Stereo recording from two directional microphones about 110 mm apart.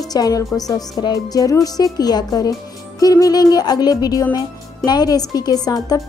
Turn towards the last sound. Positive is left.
turn(degrees=35)  # may be behind; listen again after turning